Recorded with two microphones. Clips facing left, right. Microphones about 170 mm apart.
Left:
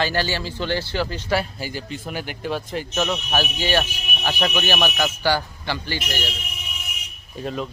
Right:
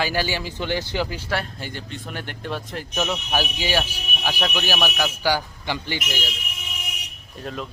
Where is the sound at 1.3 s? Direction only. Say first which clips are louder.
Left 4 dB; 5° left (ahead or behind).